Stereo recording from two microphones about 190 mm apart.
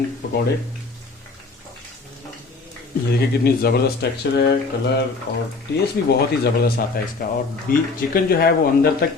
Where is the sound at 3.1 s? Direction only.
55° left (ahead or behind).